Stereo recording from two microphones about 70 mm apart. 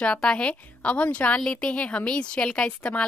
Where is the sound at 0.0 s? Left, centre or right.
Centre.